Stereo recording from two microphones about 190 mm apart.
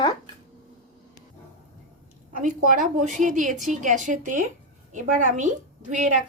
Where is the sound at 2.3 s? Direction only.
45° right (ahead or behind).